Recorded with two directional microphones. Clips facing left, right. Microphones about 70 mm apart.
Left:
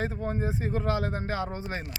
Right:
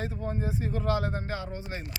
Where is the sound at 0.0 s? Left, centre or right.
Left.